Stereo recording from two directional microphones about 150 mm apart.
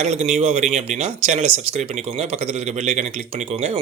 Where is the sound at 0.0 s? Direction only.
50° right (ahead or behind).